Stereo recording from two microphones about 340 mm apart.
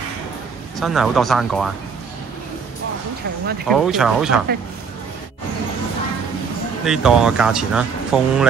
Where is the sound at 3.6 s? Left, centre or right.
Centre.